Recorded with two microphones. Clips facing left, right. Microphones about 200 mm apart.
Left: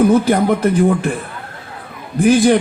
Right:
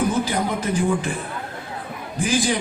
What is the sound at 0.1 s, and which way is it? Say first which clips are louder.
A man's voice: left 10 dB; 60° left (ahead or behind).